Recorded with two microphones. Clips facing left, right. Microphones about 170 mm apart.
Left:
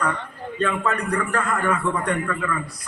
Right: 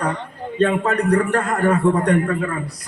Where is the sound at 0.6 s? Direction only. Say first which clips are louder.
Right 6 dB; 40° right (ahead or behind).